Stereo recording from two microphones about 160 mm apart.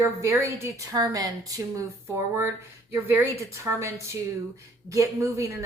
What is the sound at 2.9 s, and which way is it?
A woman's voice, 15° right (ahead or behind).